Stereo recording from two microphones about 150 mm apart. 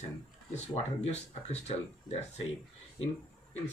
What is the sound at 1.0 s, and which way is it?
Speech, 45° left (ahead or behind).